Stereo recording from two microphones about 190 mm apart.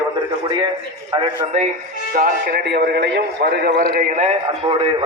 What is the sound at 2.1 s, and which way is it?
A man's voice, 50° right (ahead or behind).